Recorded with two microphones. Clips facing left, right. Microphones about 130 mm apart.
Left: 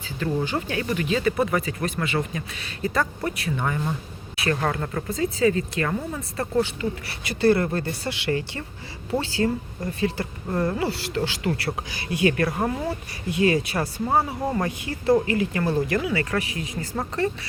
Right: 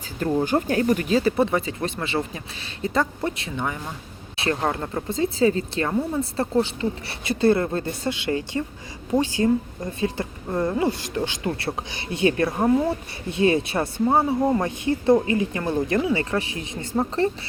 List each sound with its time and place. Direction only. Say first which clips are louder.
0.4 s speech: right 6 dB; 45° right (ahead or behind)